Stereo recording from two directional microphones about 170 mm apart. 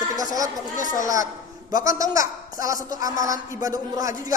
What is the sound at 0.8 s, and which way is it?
Speech, 50° left (ahead or behind).